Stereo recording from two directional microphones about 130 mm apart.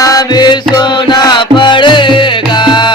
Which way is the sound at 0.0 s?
30° left (ahead or behind).